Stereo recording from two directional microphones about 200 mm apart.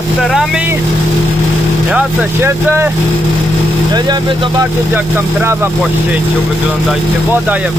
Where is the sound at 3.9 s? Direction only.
20° right (ahead or behind).